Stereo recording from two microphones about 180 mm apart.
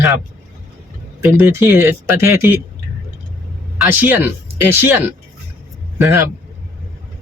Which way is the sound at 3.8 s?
10° right (ahead or behind).